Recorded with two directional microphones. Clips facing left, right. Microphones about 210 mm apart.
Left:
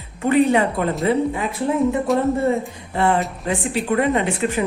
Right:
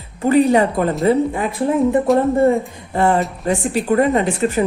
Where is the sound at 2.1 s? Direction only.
Centre (ahead or behind).